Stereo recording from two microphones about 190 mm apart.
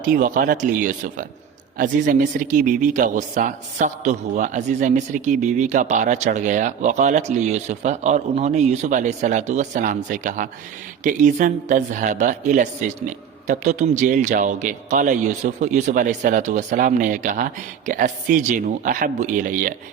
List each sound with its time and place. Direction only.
0.0 s speech: 45° right (ahead or behind)